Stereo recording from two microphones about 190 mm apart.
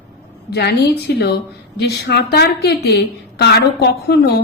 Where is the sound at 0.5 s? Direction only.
60° left (ahead or behind).